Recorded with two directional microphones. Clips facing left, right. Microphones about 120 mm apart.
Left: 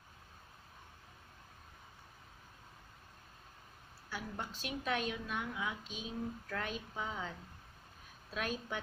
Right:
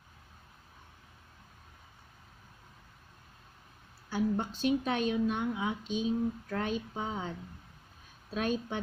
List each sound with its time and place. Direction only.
4.1 s a woman's voice: 25° right (ahead or behind)
8.4 s a woman's voice: 25° right (ahead or behind)